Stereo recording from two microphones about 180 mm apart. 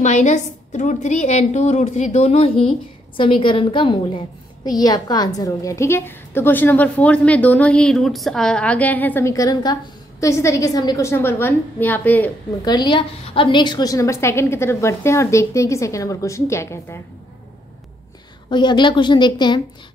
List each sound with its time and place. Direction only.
0.0 s a woman's voice: 40° left (ahead or behind); by 12.3 s 10° left (ahead or behind)
12.6 s a woman's voice: 25° left (ahead or behind)
18.5 s a woman's voice: 25° left (ahead or behind)